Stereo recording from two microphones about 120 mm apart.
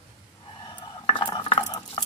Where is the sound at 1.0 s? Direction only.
40° left (ahead or behind).